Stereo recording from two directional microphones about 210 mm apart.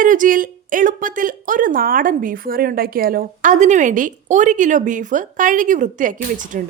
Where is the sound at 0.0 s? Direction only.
40° right (ahead or behind).